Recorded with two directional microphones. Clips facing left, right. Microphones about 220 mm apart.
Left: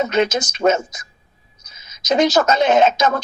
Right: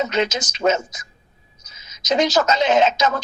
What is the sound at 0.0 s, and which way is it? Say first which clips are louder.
Speech: left 4 dB; 55° left (ahead or behind).